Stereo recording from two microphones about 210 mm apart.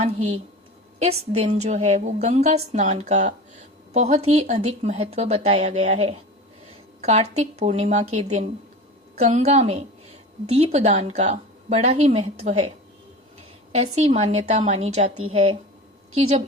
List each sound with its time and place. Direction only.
0.0 s speech: 30° right (ahead or behind)
13.7 s speech: 30° right (ahead or behind)